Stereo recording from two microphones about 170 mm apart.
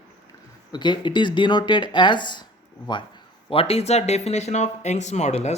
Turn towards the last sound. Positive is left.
turn(degrees=40)  # may be behind; listen again after turning